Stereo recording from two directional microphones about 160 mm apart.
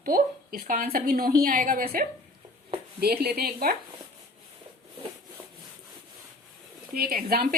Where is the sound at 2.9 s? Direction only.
75° right (ahead or behind).